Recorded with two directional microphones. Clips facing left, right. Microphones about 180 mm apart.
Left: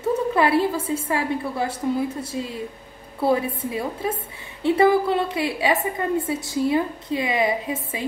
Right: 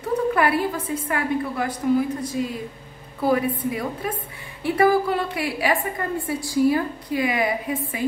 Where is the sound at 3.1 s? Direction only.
25° left (ahead or behind).